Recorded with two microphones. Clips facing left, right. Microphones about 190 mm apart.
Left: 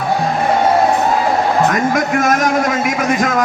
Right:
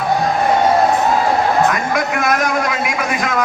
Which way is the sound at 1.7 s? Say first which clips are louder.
Left 4 dB; 45° left (ahead or behind).